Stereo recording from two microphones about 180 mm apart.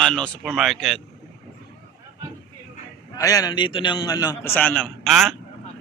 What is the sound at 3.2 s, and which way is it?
A man's voice, 20° left (ahead or behind).